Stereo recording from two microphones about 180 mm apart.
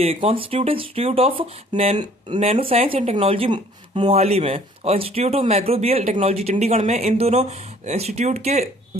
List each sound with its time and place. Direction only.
0.0 s speech: 35° right (ahead or behind)